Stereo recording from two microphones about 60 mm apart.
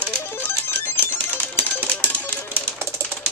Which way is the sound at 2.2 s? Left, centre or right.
Left.